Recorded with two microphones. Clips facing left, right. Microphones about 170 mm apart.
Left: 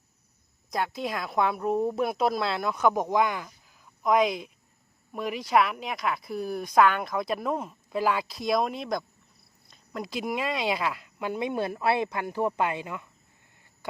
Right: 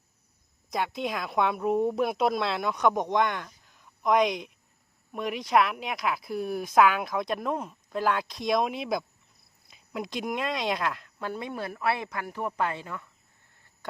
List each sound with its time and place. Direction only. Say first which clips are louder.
0.7 s a woman's voice: even; centre (ahead or behind)